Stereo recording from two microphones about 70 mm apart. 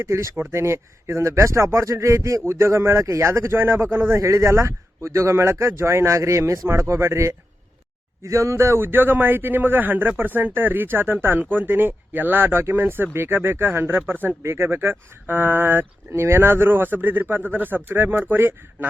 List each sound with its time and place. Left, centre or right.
0.0 s speech: right
2.4 s a man's voice: right